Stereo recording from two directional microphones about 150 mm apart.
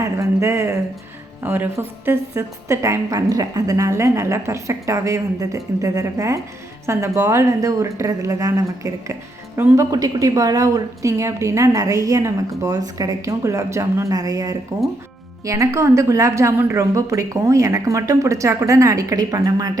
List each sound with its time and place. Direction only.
0.2 s speech: 20° right (ahead or behind)